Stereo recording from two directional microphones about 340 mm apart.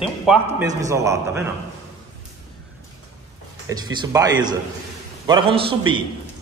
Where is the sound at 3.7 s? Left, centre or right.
Centre.